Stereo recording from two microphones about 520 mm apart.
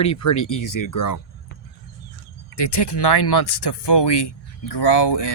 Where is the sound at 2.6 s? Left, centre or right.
Left.